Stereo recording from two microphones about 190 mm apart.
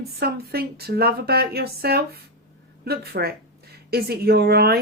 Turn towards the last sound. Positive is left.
turn(degrees=-55)  # may be behind; listen again after turning